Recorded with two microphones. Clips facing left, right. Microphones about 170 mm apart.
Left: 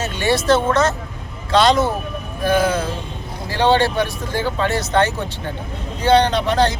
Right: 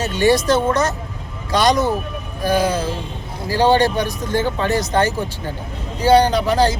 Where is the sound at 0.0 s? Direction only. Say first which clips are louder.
Right 4 dB; 40° right (ahead or behind).